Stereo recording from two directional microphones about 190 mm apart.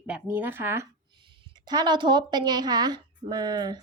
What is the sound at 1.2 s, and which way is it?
A woman's voice, 25° right (ahead or behind).